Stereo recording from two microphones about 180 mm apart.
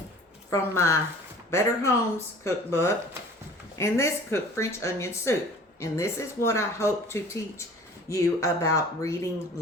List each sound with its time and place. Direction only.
0.5 s speech: 15° left (ahead or behind)